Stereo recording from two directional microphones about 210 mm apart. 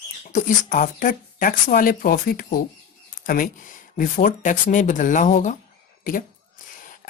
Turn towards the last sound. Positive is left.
turn(degrees=40)  # may be behind; listen again after turning